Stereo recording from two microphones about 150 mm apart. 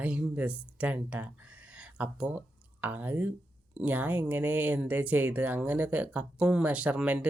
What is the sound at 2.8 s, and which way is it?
Speech, 10° right (ahead or behind).